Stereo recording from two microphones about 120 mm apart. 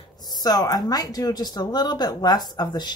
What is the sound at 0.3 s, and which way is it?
Speech, 35° left (ahead or behind).